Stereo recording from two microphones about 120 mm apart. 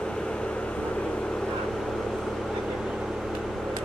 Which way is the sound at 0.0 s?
5° left (ahead or behind).